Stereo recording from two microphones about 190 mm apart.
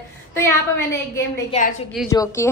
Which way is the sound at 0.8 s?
15° left (ahead or behind).